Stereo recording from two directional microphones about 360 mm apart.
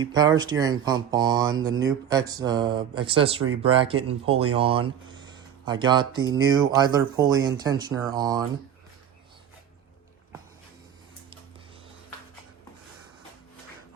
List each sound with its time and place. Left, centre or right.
0.0 s speech: centre
5.0 s a sound: centre
6.4 s speech: centre